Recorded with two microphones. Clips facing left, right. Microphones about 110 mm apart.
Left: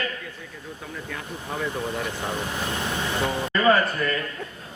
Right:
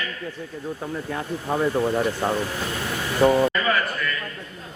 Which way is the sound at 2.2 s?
40° right (ahead or behind).